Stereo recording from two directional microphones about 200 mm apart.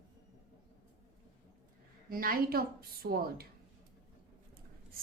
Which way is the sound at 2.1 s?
45° right (ahead or behind).